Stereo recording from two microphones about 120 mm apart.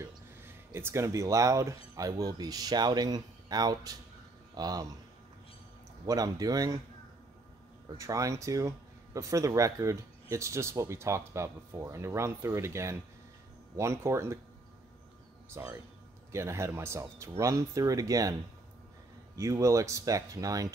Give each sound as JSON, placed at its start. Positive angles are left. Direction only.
{"t": 0.7, "sound": "speech", "side_deg": -20}
{"t": 6.0, "sound": "speech", "side_deg": -30}
{"t": 8.0, "sound": "speech", "side_deg": -25}
{"t": 15.5, "sound": "speech", "side_deg": -20}
{"t": 19.3, "sound": "speech", "side_deg": -25}